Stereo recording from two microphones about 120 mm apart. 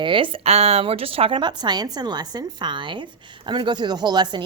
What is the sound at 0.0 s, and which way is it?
A woman's voice, 45° right (ahead or behind).